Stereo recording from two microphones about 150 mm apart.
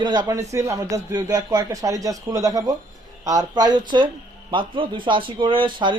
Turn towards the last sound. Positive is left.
turn(degrees=-35)  # may be behind; listen again after turning